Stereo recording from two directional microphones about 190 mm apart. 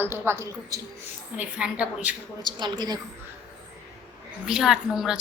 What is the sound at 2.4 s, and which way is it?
Speech, 20° right (ahead or behind).